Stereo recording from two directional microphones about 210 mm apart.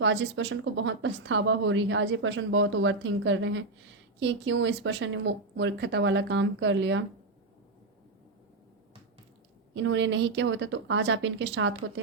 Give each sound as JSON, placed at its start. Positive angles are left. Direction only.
{"t": 0.0, "sound": "speech", "side_deg": -60}
{"t": 9.7, "sound": "speech", "side_deg": -60}